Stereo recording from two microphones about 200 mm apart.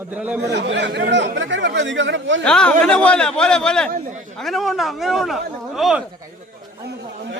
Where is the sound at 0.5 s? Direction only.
60° right (ahead or behind).